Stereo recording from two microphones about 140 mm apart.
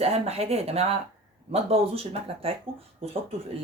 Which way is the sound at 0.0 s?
45° right (ahead or behind).